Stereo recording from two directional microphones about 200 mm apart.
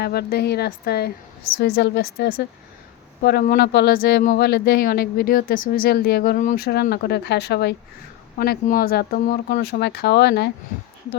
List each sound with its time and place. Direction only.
0.0 s speech: 50° left (ahead or behind)